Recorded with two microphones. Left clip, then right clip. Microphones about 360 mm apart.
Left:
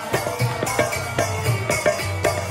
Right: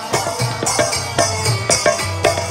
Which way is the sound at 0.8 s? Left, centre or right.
Centre.